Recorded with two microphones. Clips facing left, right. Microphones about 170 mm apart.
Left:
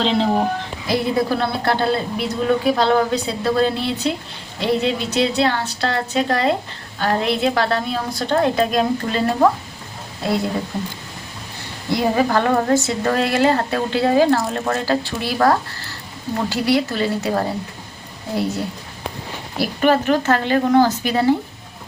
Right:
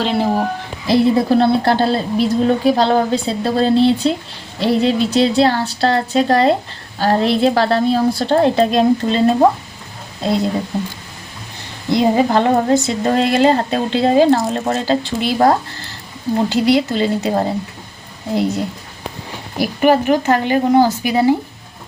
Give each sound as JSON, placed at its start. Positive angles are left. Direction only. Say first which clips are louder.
{"t": 0.0, "sound": "speech", "louder": "right 1 dB", "side_deg": -10}
{"t": 0.9, "sound": "a woman's voice", "louder": "right 6 dB", "side_deg": -30}
{"t": 11.9, "sound": "a woman's voice", "louder": "right 4 dB", "side_deg": -20}